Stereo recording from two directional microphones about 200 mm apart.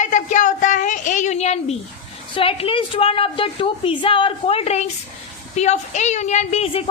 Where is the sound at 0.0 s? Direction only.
40° left (ahead or behind).